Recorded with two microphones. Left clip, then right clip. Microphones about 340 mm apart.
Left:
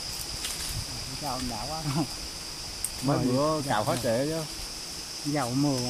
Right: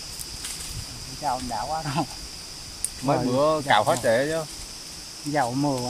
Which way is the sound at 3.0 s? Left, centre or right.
Right.